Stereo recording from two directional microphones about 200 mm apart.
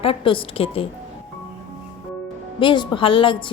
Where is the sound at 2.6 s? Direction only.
25° left (ahead or behind).